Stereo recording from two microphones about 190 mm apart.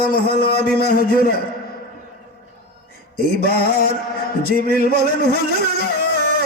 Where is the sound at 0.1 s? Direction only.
55° left (ahead or behind).